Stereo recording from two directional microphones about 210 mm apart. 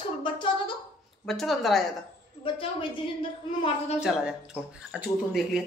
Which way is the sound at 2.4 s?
25° left (ahead or behind).